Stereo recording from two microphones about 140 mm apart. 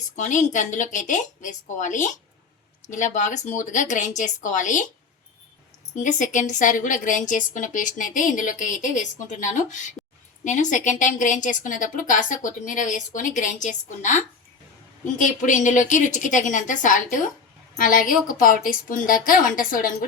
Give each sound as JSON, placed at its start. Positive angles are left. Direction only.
{"t": 0.2, "sound": "a woman's voice", "side_deg": 60}
{"t": 6.0, "sound": "a woman's voice", "side_deg": 65}